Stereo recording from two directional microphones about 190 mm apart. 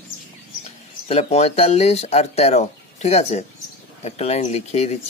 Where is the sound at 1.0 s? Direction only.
35° left (ahead or behind).